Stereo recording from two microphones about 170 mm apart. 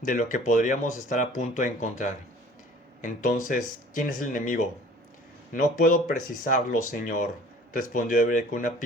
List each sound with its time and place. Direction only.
0.0 s speech: 50° left (ahead or behind)
5.7 s speech: 55° left (ahead or behind)